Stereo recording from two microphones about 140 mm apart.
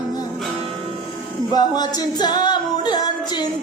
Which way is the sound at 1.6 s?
30° left (ahead or behind).